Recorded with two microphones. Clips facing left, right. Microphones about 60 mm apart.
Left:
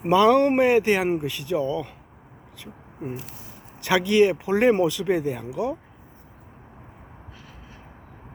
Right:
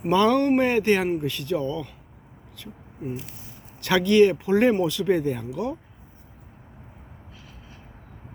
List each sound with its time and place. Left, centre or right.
0.1 s speech: centre